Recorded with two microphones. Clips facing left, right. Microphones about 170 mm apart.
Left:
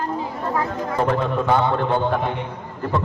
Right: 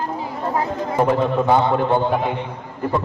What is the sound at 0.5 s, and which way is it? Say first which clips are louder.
A man's voice: right 3 dB; 25° right (ahead or behind).